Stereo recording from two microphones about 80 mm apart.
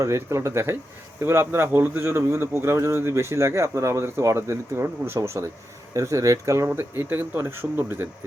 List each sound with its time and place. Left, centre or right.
0.0 s speech: right